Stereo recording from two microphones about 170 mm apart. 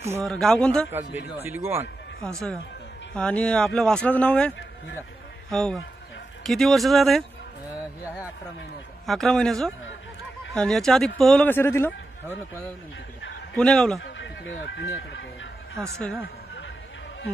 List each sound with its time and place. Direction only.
0.2 s speech: 5° left (ahead or behind)
0.8 s speech: 15° right (ahead or behind)
2.2 s speech: 5° left (ahead or behind)
9.0 s speech: centre (ahead or behind)
13.6 s speech: 5° left (ahead or behind)
14.0 s speech: 90° left
15.8 s speech: 5° left (ahead or behind)